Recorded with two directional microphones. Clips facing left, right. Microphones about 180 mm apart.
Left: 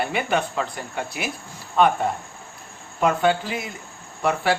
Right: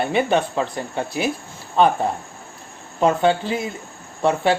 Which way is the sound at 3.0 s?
30° right (ahead or behind).